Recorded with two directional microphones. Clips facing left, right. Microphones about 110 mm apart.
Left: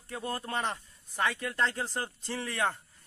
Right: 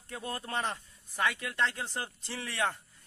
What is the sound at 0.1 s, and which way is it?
Speech, 30° left (ahead or behind).